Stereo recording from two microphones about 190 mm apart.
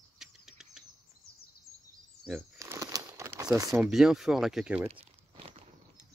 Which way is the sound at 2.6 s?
15° right (ahead or behind).